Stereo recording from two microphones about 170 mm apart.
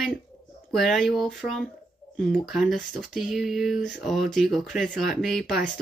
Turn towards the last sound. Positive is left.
turn(degrees=0)  # may be behind; listen again after turning